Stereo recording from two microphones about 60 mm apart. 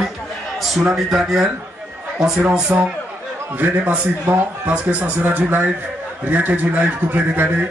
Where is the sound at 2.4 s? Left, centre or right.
Right.